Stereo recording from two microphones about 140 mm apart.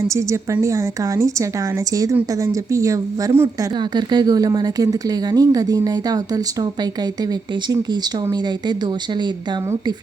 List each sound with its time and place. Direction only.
0.1 s speech: 20° right (ahead or behind)